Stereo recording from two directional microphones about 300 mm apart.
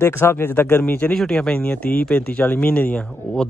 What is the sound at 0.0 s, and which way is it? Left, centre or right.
Speech, centre.